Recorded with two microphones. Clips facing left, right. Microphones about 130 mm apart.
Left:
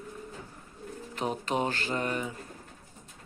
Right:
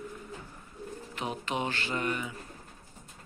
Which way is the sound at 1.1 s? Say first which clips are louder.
Left 4 dB; 40° left (ahead or behind).